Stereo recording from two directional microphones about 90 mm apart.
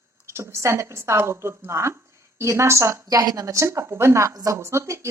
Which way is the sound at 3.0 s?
40° right (ahead or behind).